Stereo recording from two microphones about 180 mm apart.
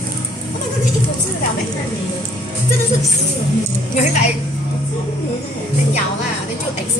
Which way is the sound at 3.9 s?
40° left (ahead or behind).